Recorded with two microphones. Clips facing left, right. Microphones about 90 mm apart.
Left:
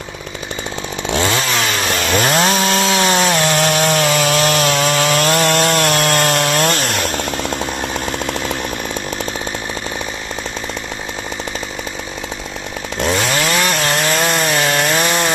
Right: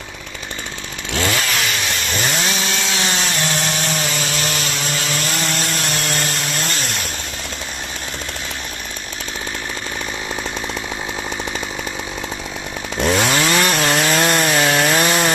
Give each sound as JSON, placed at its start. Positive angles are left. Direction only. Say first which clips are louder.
{"t": 1.1, "sound": "chainsaw", "louder": "left 3 dB", "side_deg": 25}
{"t": 1.6, "sound": "chainsaw", "louder": "left 4 dB", "side_deg": 40}
{"t": 2.1, "sound": "chainsaw", "louder": "left 8 dB", "side_deg": 55}
{"t": 12.9, "sound": "chainsaw", "louder": "even", "side_deg": 0}